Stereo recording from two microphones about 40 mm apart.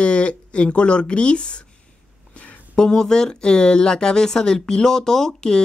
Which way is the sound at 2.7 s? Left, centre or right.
Centre.